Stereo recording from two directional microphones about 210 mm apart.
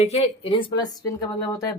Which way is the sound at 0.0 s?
30° left (ahead or behind).